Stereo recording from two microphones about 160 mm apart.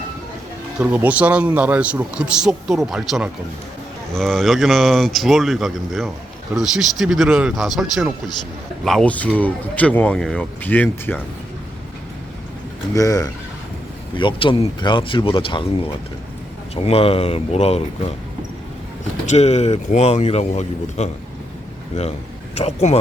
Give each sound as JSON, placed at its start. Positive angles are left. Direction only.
{"t": 0.8, "sound": "speech", "side_deg": -10}
{"t": 12.9, "sound": "speech", "side_deg": 20}
{"t": 19.2, "sound": "a man's voice", "side_deg": 45}